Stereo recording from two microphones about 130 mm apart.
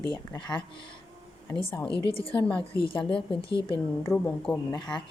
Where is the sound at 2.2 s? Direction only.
45° left (ahead or behind).